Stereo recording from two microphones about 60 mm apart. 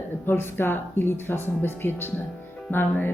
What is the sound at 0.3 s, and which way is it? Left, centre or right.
Speech, left.